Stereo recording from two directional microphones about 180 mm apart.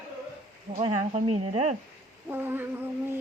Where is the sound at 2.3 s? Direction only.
10° right (ahead or behind).